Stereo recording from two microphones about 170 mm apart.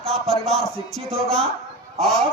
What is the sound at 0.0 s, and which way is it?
A man's voice, centre (ahead or behind).